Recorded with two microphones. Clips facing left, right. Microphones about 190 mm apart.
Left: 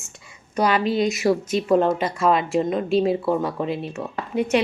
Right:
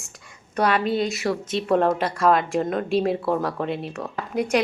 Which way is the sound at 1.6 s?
Centre (ahead or behind).